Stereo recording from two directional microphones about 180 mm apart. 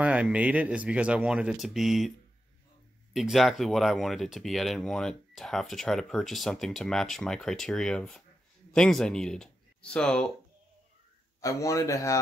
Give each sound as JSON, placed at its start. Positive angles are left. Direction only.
{"t": 0.0, "sound": "speech", "side_deg": -5}
{"t": 11.4, "sound": "a man's voice", "side_deg": 20}